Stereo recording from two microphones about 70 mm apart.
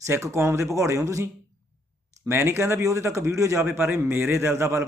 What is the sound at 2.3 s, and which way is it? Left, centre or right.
A man's voice, right.